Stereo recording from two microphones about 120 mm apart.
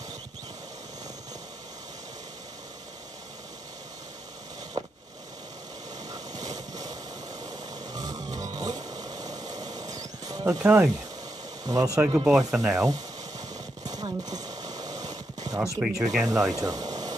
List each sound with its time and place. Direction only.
4.7 s vehicle: 40° right (ahead or behind)
6.1 s vehicle: 30° right (ahead or behind)
7.9 s music: 30° right (ahead or behind)
11.6 s speech: 30° right (ahead or behind)
12.3 s speech: 5° right (ahead or behind)
12.7 s speech: 30° right (ahead or behind)
13.8 s a sound: 30° right (ahead or behind)
15.6 s speech: 5° right (ahead or behind)
16.3 s speech: 30° right (ahead or behind)